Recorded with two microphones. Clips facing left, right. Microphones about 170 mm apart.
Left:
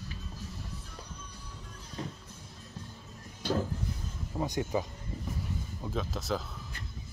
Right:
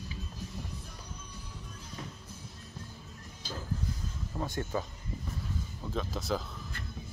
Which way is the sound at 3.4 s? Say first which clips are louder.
Left 12 dB; 65° left (ahead or behind).